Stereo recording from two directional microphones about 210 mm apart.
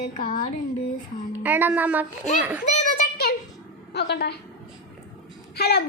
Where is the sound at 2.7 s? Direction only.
35° left (ahead or behind).